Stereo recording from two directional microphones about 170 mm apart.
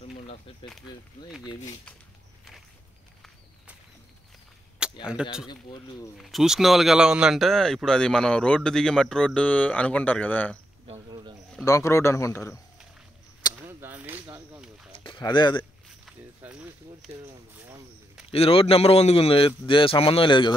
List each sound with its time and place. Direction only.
5.0 s speech: 5° right (ahead or behind)
5.5 s speech: 25° left (ahead or behind)
6.1 s speech: centre (ahead or behind)
10.9 s cricket: 30° right (ahead or behind)
11.6 s speech: 20° left (ahead or behind)
13.7 s a sound: 10° right (ahead or behind)
14.9 s a sound: 30° left (ahead or behind)
16.4 s a sound: 10° right (ahead or behind)
18.3 s a man's voice: 35° left (ahead or behind)